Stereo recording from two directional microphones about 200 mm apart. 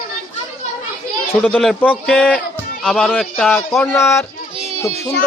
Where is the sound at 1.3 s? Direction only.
10° left (ahead or behind).